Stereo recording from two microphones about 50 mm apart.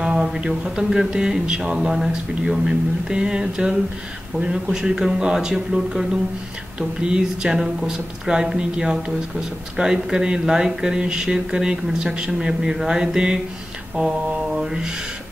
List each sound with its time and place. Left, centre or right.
0.0 s a sound: centre
0.5 s speech: centre
13.9 s mantra: right
14.5 s speech: centre